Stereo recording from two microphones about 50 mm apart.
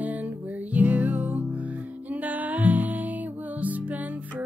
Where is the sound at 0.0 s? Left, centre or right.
Right.